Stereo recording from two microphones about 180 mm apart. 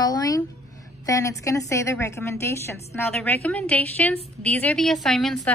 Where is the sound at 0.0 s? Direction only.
20° left (ahead or behind).